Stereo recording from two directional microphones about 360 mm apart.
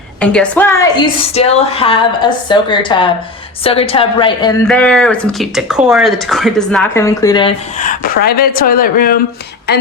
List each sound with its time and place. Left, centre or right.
0.2 s a woman's voice: centre
4.6 s speech: centre; by 9.1 s left